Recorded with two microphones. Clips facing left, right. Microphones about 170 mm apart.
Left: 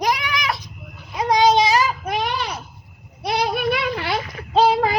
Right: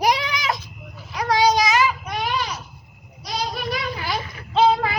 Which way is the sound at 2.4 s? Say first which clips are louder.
Left 1 dB; 60° left (ahead or behind).